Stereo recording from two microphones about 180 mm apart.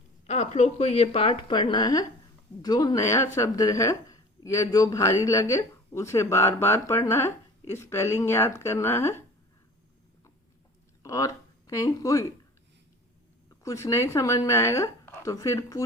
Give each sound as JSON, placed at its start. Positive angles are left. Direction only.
{"t": 0.3, "sound": "a woman's voice", "side_deg": 40}
{"t": 11.0, "sound": "speech", "side_deg": 20}
{"t": 13.5, "sound": "speech", "side_deg": 15}